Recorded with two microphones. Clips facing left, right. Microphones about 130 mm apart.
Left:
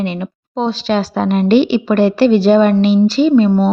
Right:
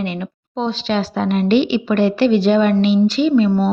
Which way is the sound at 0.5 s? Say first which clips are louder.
Left 3 dB; 40° left (ahead or behind).